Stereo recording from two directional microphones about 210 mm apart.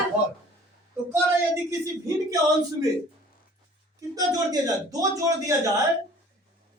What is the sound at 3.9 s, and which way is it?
Speech, 15° right (ahead or behind).